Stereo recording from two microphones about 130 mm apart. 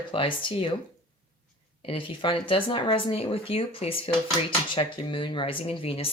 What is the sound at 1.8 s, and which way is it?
Speech, 45° left (ahead or behind).